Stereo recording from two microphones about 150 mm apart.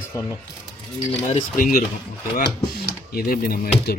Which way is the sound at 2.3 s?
90° left.